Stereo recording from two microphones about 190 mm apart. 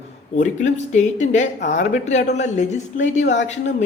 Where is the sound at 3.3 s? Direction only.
70° left (ahead or behind).